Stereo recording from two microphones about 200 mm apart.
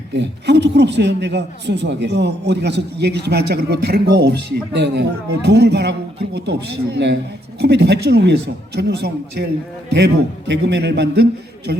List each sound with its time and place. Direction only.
0.1 s a man's voice: 60° right (ahead or behind)